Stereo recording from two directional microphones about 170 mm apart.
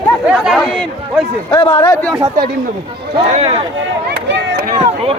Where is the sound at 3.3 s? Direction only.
40° right (ahead or behind).